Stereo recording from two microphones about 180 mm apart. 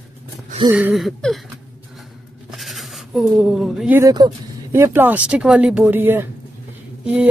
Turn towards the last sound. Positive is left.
turn(degrees=-5)  # may be behind; listen again after turning